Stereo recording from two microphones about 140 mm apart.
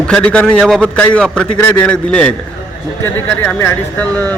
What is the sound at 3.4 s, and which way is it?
Speech, 10° left (ahead or behind).